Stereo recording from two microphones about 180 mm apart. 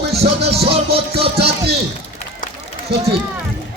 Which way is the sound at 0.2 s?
35° right (ahead or behind).